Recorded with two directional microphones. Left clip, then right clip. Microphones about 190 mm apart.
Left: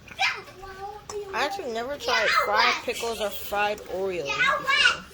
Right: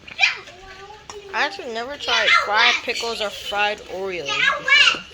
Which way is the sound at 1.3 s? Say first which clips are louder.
Right 5 dB; 5° left (ahead or behind).